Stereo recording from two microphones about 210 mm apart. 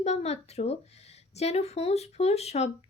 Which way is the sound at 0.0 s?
30° left (ahead or behind).